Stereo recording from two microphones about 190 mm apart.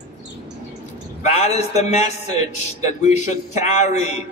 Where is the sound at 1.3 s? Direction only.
35° left (ahead or behind).